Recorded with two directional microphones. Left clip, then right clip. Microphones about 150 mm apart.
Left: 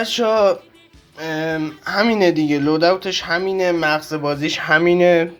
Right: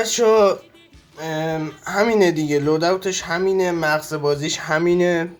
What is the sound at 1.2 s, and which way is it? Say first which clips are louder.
Speech: left 2 dB; 50° left (ahead or behind).